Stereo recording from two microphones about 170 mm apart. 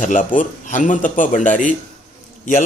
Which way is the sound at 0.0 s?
50° left (ahead or behind).